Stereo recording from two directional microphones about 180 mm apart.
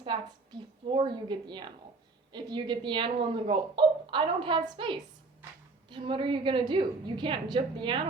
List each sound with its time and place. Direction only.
0.9 s a woman's voice: 25° right (ahead or behind)